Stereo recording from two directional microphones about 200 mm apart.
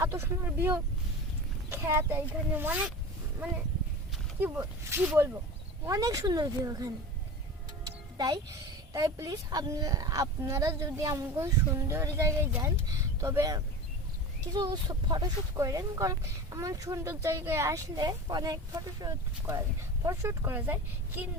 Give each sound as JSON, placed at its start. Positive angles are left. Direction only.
{"t": 0.0, "sound": "a sound", "side_deg": -15}
{"t": 1.7, "sound": "speech", "side_deg": -10}
{"t": 4.4, "sound": "speech", "side_deg": -10}
{"t": 8.9, "sound": "speech", "side_deg": -15}